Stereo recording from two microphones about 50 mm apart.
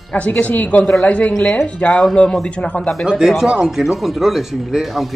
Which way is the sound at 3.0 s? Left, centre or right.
Centre.